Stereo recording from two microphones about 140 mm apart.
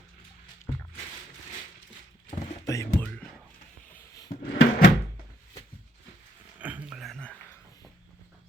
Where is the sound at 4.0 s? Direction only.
25° left (ahead or behind).